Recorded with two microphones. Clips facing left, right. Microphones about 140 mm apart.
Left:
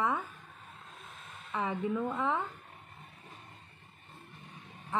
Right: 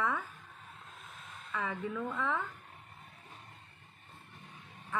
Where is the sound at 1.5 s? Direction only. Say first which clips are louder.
Left 4 dB; 20° left (ahead or behind).